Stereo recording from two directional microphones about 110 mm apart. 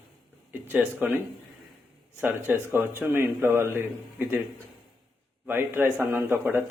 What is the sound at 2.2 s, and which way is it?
A man's voice, 20° right (ahead or behind).